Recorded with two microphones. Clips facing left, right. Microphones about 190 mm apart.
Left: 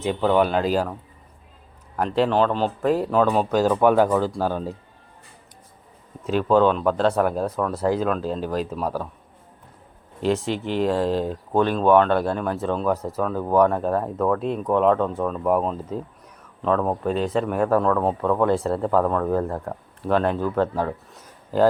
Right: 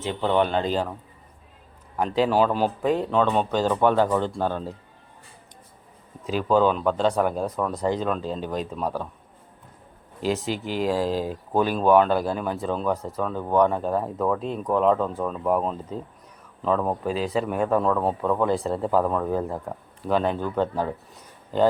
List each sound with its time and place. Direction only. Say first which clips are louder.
0.0 s speech: left 3 dB; 10° left (ahead or behind)
2.0 s speech: left 1 dB; centre (ahead or behind)
2.9 s speech: left 3 dB; 5° left (ahead or behind)
6.2 s speech: left 2 dB; centre (ahead or behind)
10.2 s speech: left 3 dB; centre (ahead or behind)